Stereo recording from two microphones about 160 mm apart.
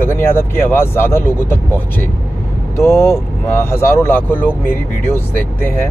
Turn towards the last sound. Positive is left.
turn(degrees=15)  # may be behind; listen again after turning